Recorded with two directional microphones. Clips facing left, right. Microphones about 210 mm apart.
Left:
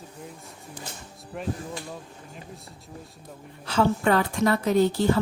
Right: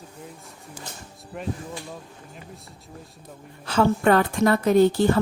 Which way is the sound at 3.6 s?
50° right (ahead or behind).